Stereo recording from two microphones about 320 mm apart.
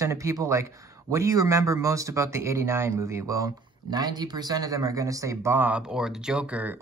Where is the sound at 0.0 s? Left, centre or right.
Centre.